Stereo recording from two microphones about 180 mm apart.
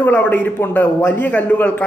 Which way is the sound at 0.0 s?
10° left (ahead or behind).